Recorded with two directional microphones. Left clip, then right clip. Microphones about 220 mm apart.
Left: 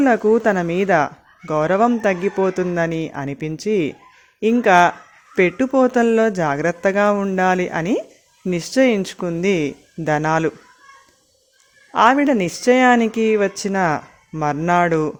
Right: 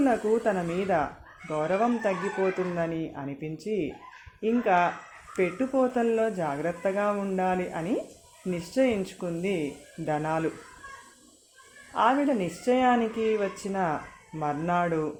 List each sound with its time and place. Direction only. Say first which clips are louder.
0.0 s speech: left 9 dB; 45° left (ahead or behind)
11.9 s speech: left 10 dB; 45° left (ahead or behind)